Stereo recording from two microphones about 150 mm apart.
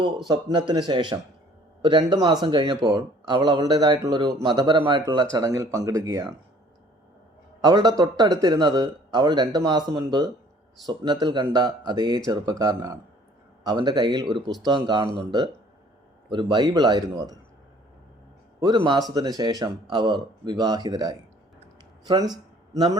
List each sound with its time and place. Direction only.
0.3 s speech: 30° right (ahead or behind)
7.6 s speech: 25° right (ahead or behind)
16.3 s speech: 30° right (ahead or behind)
18.6 s speech: 30° right (ahead or behind)